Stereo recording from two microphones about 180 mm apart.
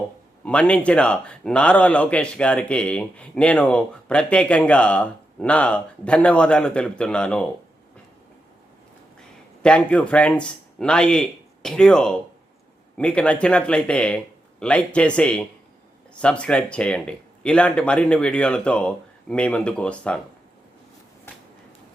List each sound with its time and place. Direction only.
0.4 s speech: 5° left (ahead or behind)
9.6 s speech: 5° left (ahead or behind)